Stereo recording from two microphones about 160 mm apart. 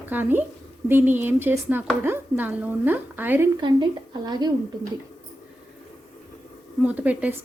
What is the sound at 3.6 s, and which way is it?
Speech, 25° right (ahead or behind).